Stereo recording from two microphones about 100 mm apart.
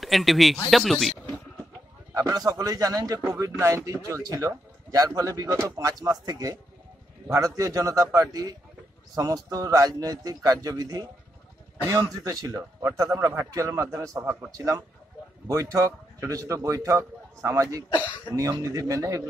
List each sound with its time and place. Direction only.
0.0 s speech: centre (ahead or behind)
2.1 s a man's voice: 40° right (ahead or behind)
17.8 s speech: 50° left (ahead or behind)
18.3 s a man's voice: 35° right (ahead or behind)